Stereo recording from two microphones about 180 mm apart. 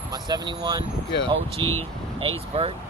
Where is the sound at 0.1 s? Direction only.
20° right (ahead or behind).